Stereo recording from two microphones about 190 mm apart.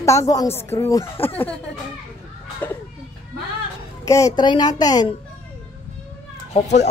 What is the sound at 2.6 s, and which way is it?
Children playing, 10° left (ahead or behind).